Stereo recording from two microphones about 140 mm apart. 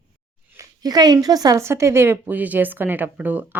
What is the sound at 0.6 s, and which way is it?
Speech, 30° right (ahead or behind).